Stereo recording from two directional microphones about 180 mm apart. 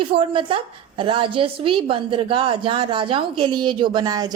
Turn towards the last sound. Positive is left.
turn(degrees=-20)  # may be behind; listen again after turning